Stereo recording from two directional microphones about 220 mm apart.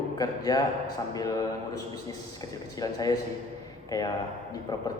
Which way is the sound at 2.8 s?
15° left (ahead or behind).